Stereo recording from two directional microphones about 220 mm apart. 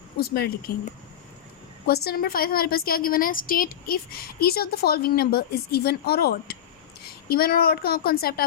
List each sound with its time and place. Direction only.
0.2 s a woman's voice: 45° left (ahead or behind)
2.0 s a woman's voice: 45° left (ahead or behind)